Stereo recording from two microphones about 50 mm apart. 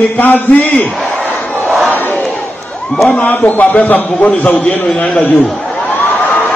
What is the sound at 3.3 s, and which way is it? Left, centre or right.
A man's voice, left.